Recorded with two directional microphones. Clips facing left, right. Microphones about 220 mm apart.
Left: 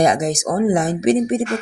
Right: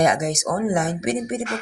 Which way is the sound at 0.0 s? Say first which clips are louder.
Left 3 dB; 35° left (ahead or behind).